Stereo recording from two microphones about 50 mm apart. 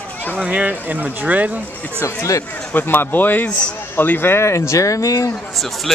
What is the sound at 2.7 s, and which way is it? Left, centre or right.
Speech, left.